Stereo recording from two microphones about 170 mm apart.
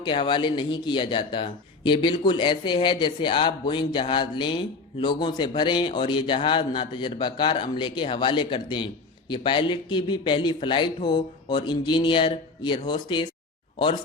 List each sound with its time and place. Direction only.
0.0 s speech: 25° left (ahead or behind)